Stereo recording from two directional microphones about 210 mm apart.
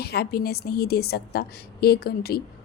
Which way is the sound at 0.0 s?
50° left (ahead or behind).